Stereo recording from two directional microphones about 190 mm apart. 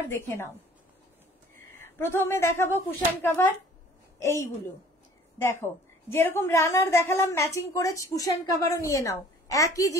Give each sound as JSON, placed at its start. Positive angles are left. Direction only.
{"t": 0.1, "sound": "a woman's voice", "side_deg": 10}
{"t": 1.7, "sound": "a woman's voice", "side_deg": 10}